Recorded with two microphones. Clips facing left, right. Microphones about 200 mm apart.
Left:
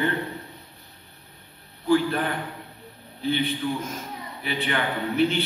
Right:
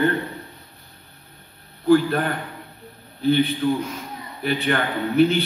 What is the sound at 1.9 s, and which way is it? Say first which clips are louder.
Speech: right 5 dB; 45° right (ahead or behind).